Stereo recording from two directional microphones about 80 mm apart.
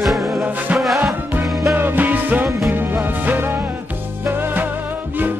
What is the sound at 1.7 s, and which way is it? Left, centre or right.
Music, right.